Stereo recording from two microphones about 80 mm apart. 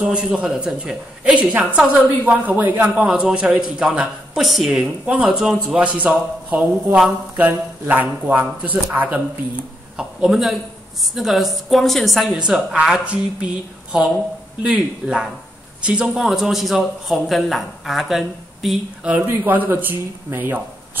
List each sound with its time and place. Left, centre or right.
0.0 s a woman's voice: centre
3.1 s a woman's voice: centre
9.9 s a man's voice: centre
12.3 s a woman's voice: centre
14.6 s a woman's voice: centre
16.1 s a man's voice: centre
19.2 s speech: right